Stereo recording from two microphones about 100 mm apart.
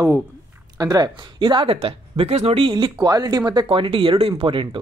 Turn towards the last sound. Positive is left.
turn(degrees=-60)  # may be behind; listen again after turning